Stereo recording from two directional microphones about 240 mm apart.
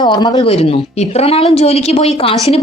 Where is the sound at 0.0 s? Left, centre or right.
Centre.